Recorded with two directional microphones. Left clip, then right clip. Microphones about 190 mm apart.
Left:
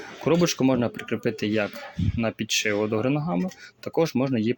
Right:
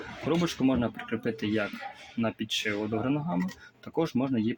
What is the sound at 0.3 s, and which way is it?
Speech, 30° left (ahead or behind).